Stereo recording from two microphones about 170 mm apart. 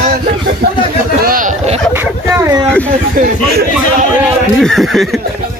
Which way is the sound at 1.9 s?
15° right (ahead or behind).